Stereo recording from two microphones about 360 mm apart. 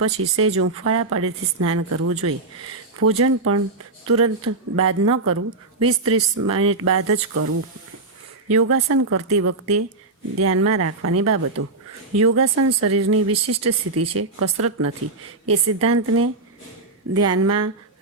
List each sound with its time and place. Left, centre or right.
0.2 s a woman's voice: right